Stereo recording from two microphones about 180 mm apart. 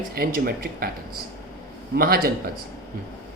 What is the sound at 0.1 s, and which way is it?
Speech, 55° right (ahead or behind).